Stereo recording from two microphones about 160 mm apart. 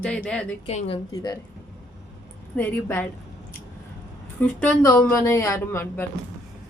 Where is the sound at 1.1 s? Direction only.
25° left (ahead or behind).